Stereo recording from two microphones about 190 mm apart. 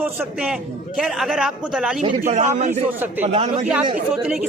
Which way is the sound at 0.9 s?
Centre (ahead or behind).